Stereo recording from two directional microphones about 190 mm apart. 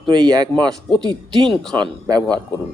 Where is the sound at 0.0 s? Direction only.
20° right (ahead or behind).